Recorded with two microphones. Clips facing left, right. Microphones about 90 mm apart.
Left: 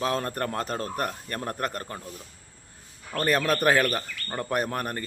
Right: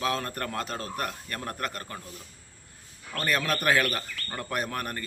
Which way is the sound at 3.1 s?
35° left (ahead or behind).